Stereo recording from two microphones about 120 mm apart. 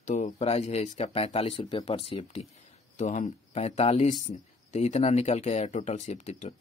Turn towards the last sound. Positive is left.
turn(degrees=75)  # may be behind; listen again after turning